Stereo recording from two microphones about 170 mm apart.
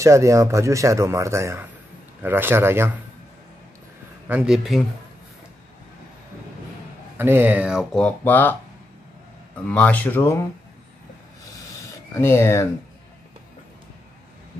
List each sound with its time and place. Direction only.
0.0 s speech: 20° right (ahead or behind)
4.3 s speech: 5° right (ahead or behind)
7.2 s speech: 10° right (ahead or behind)
7.9 s speech: 10° left (ahead or behind)
9.7 s speech: 10° left (ahead or behind)
12.1 s speech: 15° left (ahead or behind)